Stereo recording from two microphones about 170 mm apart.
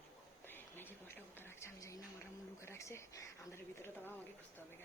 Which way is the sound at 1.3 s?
15° left (ahead or behind).